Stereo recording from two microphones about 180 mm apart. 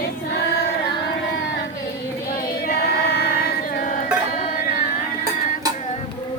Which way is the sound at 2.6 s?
60° left (ahead or behind).